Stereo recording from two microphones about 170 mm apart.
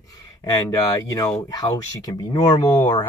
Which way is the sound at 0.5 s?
20° left (ahead or behind).